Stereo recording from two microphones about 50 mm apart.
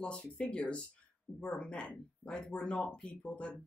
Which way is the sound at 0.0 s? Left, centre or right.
Centre.